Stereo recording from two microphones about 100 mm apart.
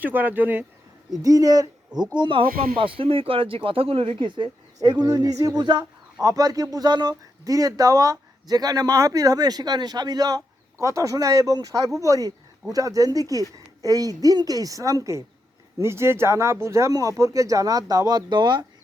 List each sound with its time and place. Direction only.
0.0 s speech: 15° right (ahead or behind)
1.2 s speech: 40° right (ahead or behind)
2.1 s speech: 55° right (ahead or behind)
4.8 s speech: 40° right (ahead or behind)
6.2 s speech: 35° right (ahead or behind)